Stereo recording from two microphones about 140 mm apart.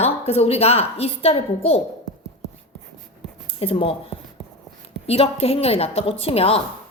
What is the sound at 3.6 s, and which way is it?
A woman's voice, 40° left (ahead or behind).